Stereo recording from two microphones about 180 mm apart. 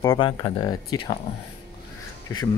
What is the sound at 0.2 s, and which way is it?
Speech, 25° left (ahead or behind).